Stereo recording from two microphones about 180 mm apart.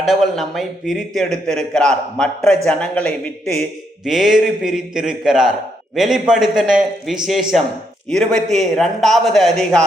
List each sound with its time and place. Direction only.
0.0 s a man's voice: centre (ahead or behind)